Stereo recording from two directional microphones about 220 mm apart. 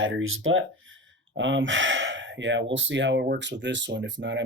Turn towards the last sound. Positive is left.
turn(degrees=-55)  # may be behind; listen again after turning